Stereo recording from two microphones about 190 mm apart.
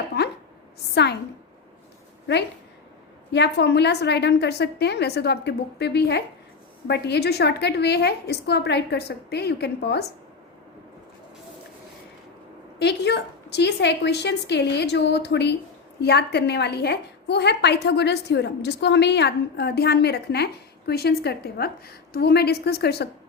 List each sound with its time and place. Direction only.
3.3 s a woman's voice: 65° left (ahead or behind)
12.8 s a woman's voice: 60° left (ahead or behind)